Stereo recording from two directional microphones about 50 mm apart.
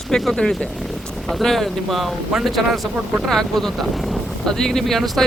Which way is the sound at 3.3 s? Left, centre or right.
Centre.